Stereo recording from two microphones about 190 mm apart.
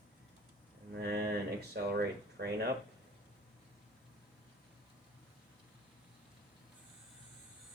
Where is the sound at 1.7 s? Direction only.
55° right (ahead or behind).